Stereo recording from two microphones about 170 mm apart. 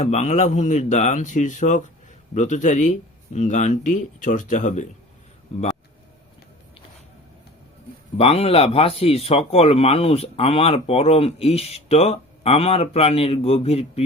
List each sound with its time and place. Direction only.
0.0 s speech: 40° left (ahead or behind)
8.2 s speech: 35° left (ahead or behind)